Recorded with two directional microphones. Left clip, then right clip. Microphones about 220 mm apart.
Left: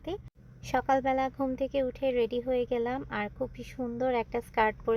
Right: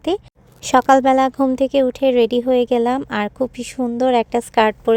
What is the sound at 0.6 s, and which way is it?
Speech, 40° right (ahead or behind).